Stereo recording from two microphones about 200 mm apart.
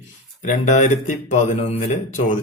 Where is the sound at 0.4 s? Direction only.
35° left (ahead or behind).